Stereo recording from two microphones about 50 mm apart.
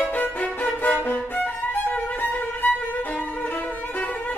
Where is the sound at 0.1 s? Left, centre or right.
Left.